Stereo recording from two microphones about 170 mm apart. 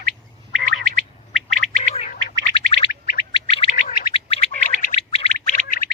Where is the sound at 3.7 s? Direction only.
60° left (ahead or behind).